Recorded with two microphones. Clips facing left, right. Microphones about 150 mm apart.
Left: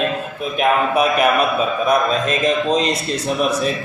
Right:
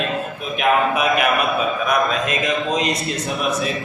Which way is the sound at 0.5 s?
35° left (ahead or behind).